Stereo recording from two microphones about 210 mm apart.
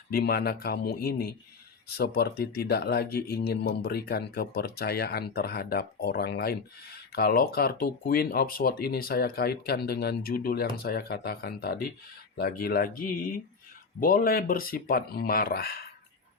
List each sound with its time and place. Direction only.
0.1 s speech: 50° left (ahead or behind)